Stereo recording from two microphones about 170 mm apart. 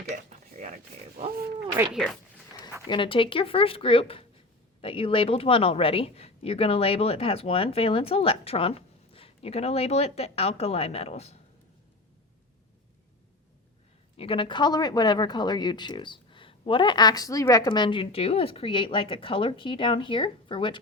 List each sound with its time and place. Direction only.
0.3 s a sound: 45° right (ahead or behind)
1.9 s speech: centre (ahead or behind)
2.8 s speech: 30° left (ahead or behind)
14.2 s speech: 30° left (ahead or behind)